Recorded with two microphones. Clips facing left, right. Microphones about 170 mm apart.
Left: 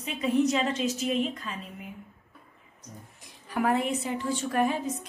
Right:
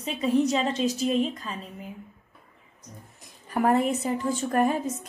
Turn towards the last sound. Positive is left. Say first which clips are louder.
# right 3 dB
turn(degrees=-45)  # may be behind; listen again after turning